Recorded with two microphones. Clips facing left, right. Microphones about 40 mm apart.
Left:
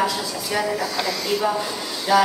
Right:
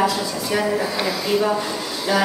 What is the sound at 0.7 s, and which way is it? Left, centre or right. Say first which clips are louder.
Speech: right 2 dB; right.